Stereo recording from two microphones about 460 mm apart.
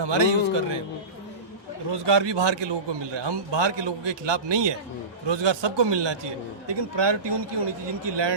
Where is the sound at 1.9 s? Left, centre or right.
Right.